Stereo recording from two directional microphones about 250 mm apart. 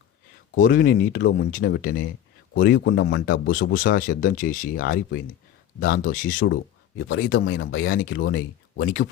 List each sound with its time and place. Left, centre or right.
0.5 s speech: left